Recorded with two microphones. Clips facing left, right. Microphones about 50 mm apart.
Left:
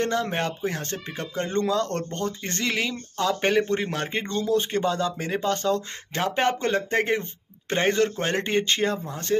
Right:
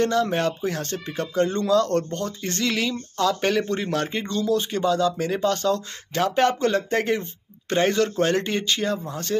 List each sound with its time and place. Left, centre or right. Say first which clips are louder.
0.0 s speech: right 4 dB; left
9.0 s speech: left 1 dB; left